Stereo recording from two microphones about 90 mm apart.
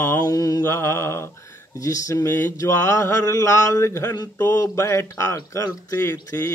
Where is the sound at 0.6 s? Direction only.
30° left (ahead or behind).